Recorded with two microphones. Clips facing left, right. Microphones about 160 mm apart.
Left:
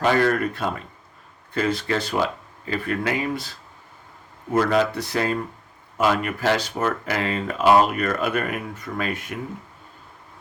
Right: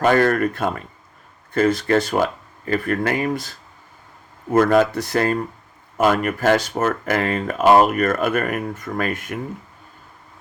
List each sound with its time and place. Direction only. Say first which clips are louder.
0.0 s speech: right 3 dB; 50° right (ahead or behind)
4.5 s speech: right 4 dB; 50° right (ahead or behind)